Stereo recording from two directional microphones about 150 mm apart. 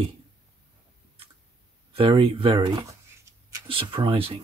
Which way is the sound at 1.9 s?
35° right (ahead or behind).